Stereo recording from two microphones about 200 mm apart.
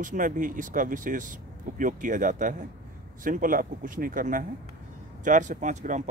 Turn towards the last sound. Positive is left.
turn(degrees=-40)  # may be behind; listen again after turning